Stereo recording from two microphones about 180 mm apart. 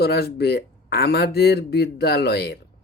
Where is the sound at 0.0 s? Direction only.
60° left (ahead or behind).